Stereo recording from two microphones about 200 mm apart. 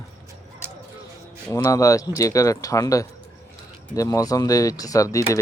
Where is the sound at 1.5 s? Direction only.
15° left (ahead or behind).